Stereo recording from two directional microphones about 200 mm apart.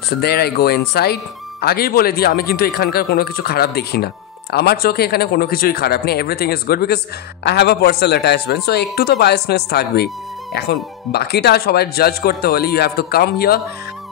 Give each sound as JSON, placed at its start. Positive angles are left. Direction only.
{"t": 0.2, "sound": "speech", "side_deg": 50}